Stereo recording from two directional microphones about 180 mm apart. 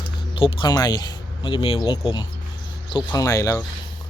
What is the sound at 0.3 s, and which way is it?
Speech, 30° left (ahead or behind).